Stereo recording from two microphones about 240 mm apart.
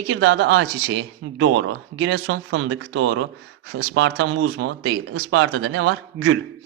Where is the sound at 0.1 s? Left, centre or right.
Right.